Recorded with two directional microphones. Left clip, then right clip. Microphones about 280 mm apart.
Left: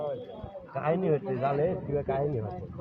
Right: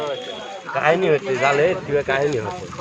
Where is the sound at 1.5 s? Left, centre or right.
Right.